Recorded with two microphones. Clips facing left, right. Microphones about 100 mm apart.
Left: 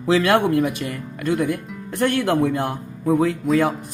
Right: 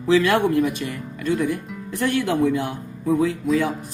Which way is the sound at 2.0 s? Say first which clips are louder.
Left 1 dB; 65° left (ahead or behind).